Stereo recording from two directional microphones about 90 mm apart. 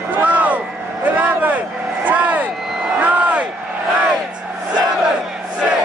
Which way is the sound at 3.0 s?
15° right (ahead or behind).